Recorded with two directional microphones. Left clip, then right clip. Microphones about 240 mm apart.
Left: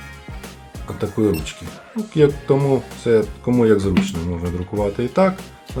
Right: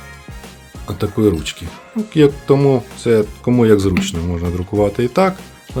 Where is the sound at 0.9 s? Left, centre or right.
Right.